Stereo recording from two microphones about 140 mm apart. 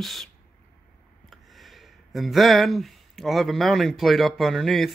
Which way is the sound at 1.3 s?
Centre (ahead or behind).